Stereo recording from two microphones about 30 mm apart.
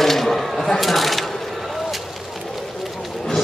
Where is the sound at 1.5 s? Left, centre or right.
Centre.